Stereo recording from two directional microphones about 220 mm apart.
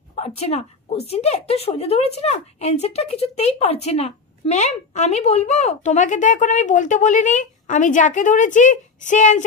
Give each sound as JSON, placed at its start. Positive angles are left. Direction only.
{"t": 0.1, "sound": "a woman's voice", "side_deg": 30}